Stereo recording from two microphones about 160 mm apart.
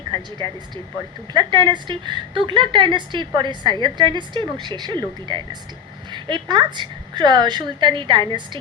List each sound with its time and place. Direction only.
1.3 s speech: 30° right (ahead or behind)